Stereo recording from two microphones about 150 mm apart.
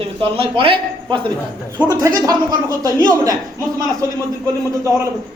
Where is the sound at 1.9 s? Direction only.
25° right (ahead or behind).